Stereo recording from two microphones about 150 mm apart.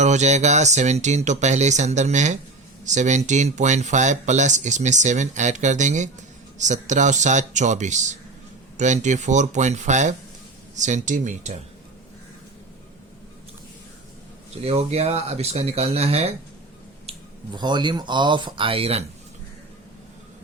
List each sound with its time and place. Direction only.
0.0 s speech: 50° right (ahead or behind)
14.6 s speech: 45° right (ahead or behind)
17.1 s speech: 30° right (ahead or behind)